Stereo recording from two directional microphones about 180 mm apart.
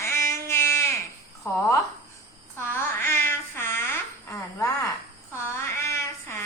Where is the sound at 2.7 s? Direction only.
15° left (ahead or behind).